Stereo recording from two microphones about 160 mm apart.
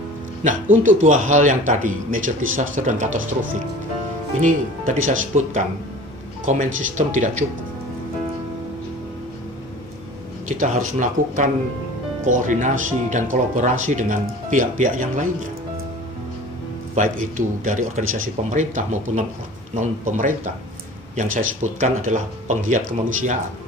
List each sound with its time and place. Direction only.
0.4 s speech: 55° right (ahead or behind)
5.0 s speech: 55° right (ahead or behind)
10.6 s speech: 55° right (ahead or behind)
16.9 s speech: 55° right (ahead or behind)